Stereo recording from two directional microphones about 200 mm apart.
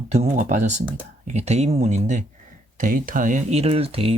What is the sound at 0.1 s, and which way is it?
Speech, 35° right (ahead or behind).